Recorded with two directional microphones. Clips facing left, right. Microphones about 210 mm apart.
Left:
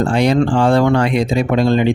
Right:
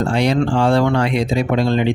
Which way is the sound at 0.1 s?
50° left (ahead or behind).